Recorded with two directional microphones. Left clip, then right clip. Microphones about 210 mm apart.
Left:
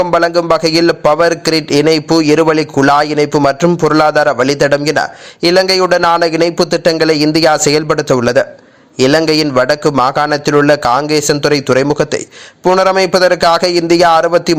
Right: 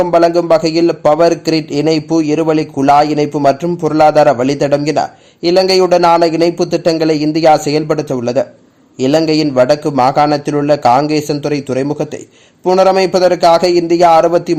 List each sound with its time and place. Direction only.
0.0 s a man's voice: 20° left (ahead or behind)
0.5 s a man's voice: 10° left (ahead or behind)